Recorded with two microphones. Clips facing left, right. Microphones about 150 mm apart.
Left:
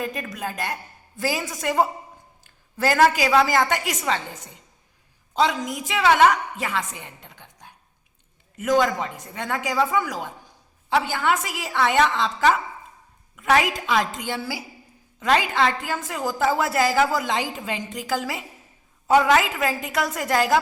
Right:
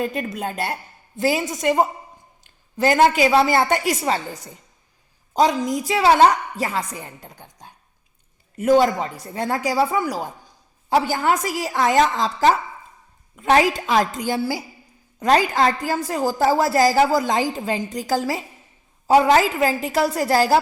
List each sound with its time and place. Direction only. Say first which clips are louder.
0.0 s a woman's voice: right 4 dB; 30° right (ahead or behind)
8.5 s a woman's voice: right 4 dB; 35° right (ahead or behind)